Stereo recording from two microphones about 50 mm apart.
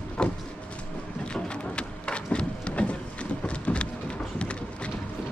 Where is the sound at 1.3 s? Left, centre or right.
Centre.